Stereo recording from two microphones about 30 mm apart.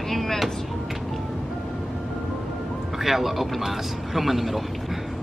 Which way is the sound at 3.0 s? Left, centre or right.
Centre.